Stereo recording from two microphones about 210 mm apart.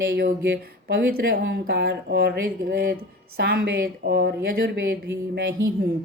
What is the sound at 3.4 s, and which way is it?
A woman's voice, 50° right (ahead or behind).